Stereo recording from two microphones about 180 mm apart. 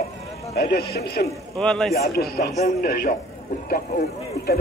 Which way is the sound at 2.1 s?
60° left (ahead or behind).